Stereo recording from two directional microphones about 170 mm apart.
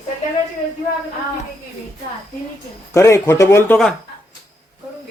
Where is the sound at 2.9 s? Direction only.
15° left (ahead or behind).